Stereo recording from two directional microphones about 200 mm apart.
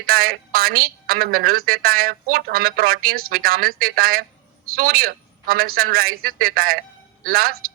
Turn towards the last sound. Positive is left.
turn(degrees=-50)  # may be behind; listen again after turning